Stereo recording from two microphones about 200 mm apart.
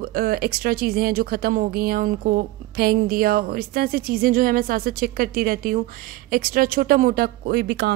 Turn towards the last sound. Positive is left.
turn(degrees=-55)  # may be behind; listen again after turning